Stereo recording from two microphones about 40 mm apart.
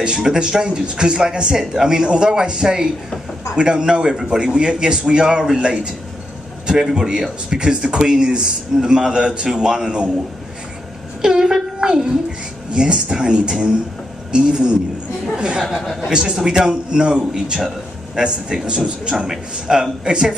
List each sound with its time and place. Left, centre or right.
0.2 s speech: centre
11.2 s speech: centre
15.6 s speech: centre
16.1 s speech: centre
19.1 s speech: centre
19.5 s speech: right